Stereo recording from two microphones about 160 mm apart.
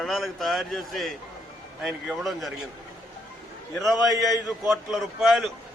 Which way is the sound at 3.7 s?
Centre (ahead or behind).